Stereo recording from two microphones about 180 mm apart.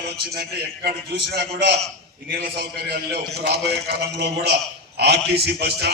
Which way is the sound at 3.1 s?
60° right (ahead or behind).